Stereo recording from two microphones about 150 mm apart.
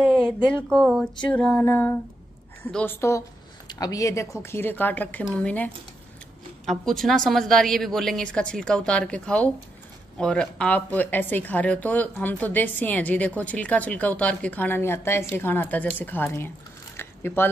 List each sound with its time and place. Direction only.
0.1 s a woman's voice: 5° left (ahead or behind)